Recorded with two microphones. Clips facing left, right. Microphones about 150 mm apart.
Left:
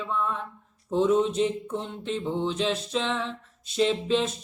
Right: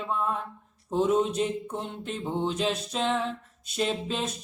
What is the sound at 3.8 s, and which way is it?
Mantra, 45° right (ahead or behind).